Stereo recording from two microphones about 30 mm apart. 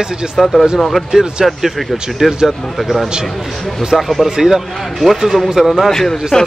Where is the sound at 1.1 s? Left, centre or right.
Right.